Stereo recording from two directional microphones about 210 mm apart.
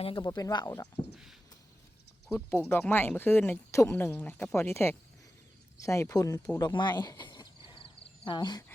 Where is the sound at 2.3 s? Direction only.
10° left (ahead or behind).